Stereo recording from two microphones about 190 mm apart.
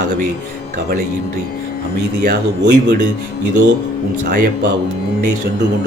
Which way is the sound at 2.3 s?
55° right (ahead or behind).